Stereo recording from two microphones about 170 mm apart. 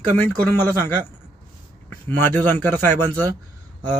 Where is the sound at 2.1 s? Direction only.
10° left (ahead or behind).